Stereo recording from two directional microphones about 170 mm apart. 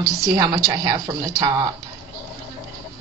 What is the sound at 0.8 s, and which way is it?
Speech, 25° right (ahead or behind).